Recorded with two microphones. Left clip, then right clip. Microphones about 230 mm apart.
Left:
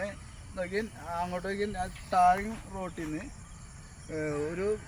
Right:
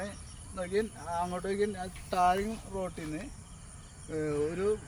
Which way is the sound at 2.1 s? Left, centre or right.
Right.